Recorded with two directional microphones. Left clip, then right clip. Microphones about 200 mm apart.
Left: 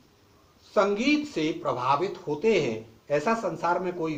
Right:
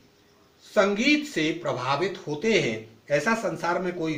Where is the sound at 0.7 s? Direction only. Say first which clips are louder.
Right 2 dB; 30° right (ahead or behind).